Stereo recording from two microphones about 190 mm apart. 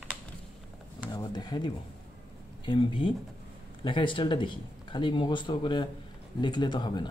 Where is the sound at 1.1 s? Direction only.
20° left (ahead or behind).